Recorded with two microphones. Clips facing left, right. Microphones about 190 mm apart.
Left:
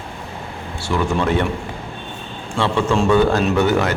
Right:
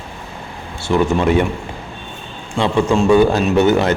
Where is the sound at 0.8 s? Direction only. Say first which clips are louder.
Right 4 dB; 20° right (ahead or behind).